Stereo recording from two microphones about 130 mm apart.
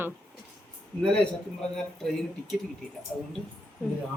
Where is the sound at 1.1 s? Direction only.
5° left (ahead or behind).